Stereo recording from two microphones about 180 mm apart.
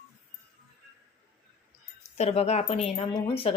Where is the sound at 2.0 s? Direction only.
40° left (ahead or behind).